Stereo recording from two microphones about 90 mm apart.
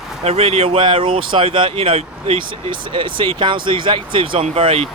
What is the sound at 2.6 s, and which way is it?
Speech, 70° right (ahead or behind).